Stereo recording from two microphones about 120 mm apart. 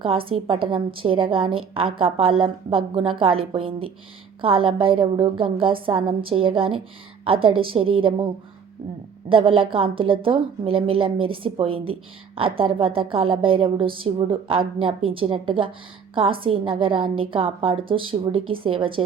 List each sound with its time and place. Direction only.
0.0 s a woman's voice: 50° right (ahead or behind)
9.3 s a woman's voice: 50° right (ahead or behind)